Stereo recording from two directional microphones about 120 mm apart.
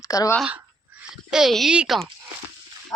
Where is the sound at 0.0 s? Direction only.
30° left (ahead or behind).